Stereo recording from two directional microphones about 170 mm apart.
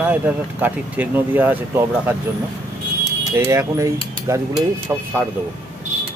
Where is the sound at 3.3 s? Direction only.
15° right (ahead or behind).